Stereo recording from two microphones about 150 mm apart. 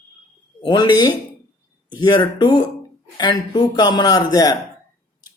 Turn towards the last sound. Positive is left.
turn(degrees=25)  # may be behind; listen again after turning